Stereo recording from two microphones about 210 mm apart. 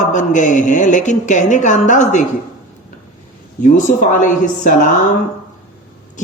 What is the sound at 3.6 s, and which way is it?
A man's voice, 35° left (ahead or behind).